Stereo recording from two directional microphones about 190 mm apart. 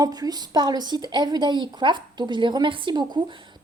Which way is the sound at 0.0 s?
20° right (ahead or behind).